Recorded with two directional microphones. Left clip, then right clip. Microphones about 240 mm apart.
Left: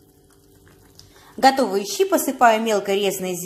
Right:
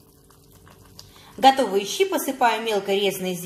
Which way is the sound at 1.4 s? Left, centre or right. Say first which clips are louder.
Even; left.